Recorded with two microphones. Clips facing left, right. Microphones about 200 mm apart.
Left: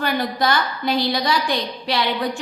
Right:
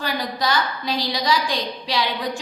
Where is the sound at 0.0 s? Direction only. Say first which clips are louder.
Left 4 dB; 55° left (ahead or behind).